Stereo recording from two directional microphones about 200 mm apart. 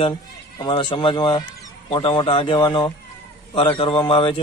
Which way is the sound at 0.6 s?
25° left (ahead or behind).